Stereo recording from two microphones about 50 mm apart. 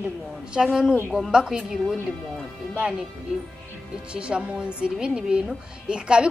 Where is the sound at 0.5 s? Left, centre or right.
Centre.